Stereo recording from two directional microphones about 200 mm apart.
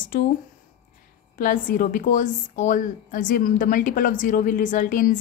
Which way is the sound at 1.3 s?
45° left (ahead or behind).